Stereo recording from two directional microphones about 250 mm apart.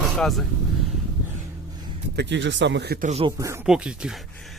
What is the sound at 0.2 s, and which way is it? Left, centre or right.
Speech, centre.